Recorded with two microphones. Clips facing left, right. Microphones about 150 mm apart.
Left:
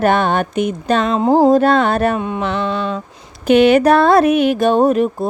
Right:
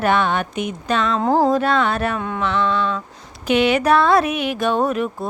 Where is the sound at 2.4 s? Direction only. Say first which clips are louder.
Right 3 dB; 45° left (ahead or behind).